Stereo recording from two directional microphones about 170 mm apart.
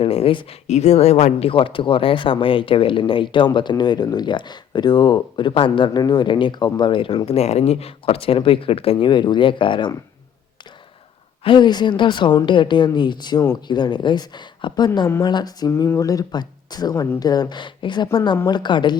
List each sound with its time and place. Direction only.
0.0 s speech: 35° left (ahead or behind)
11.4 s a woman's voice: 25° left (ahead or behind)